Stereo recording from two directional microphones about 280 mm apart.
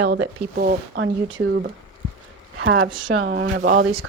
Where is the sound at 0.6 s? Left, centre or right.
Right.